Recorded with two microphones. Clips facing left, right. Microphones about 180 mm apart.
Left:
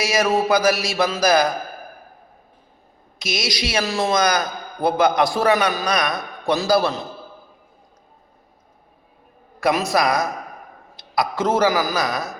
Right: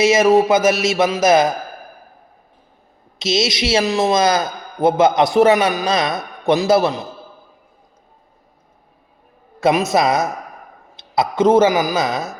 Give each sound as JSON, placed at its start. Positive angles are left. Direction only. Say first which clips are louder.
{"t": 0.0, "sound": "a man's voice", "louder": "right 7 dB", "side_deg": -20}
{"t": 3.2, "sound": "a man's voice", "louder": "right 7 dB", "side_deg": -25}
{"t": 9.6, "sound": "a man's voice", "louder": "right 4 dB", "side_deg": -20}